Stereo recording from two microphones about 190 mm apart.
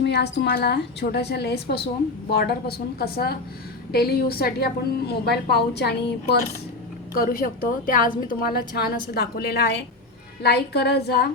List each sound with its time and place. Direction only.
0.0 s a woman's voice: 60° left (ahead or behind)